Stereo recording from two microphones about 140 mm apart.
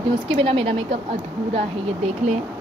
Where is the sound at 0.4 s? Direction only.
40° right (ahead or behind).